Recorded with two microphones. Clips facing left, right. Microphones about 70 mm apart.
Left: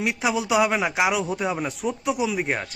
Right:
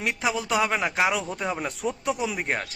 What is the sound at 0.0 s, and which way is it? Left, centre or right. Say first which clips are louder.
A man's voice: left 3 dB; centre.